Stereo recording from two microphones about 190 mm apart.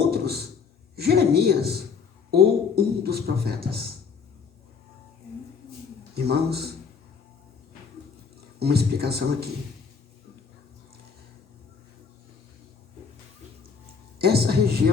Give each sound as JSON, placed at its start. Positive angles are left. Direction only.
{"t": 0.9, "sound": "a woman's voice", "side_deg": -60}
{"t": 6.1, "sound": "speech", "side_deg": -55}
{"t": 8.5, "sound": "speech", "side_deg": -55}
{"t": 14.2, "sound": "music", "side_deg": -55}